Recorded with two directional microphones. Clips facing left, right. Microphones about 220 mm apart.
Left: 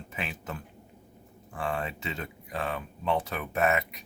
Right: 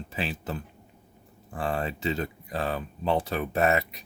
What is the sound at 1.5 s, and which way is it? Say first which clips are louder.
Speech: right 3 dB; 35° right (ahead or behind).